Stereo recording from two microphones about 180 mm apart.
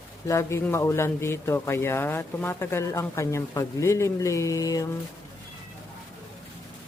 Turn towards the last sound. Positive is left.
turn(degrees=20)  # may be behind; listen again after turning